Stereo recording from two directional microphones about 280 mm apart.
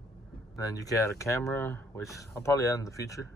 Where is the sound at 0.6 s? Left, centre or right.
Centre.